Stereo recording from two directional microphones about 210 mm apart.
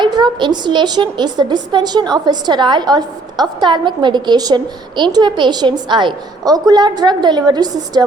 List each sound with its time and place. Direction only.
0.0 s a woman's voice: 20° right (ahead or behind)